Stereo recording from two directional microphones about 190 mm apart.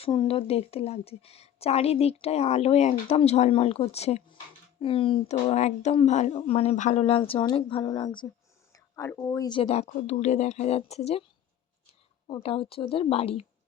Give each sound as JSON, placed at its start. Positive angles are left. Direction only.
{"t": 0.0, "sound": "speech", "side_deg": 30}